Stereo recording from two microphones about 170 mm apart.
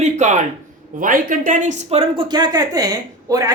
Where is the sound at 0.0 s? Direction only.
45° right (ahead or behind).